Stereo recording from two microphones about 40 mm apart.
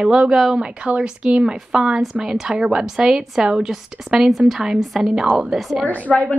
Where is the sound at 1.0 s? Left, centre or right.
Right.